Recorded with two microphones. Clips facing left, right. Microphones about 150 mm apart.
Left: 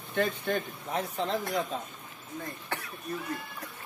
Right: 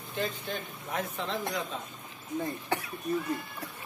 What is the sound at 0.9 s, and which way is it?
Speech, 30° left (ahead or behind).